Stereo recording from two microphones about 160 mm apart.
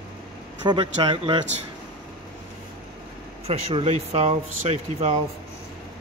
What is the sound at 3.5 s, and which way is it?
Speech, 40° right (ahead or behind).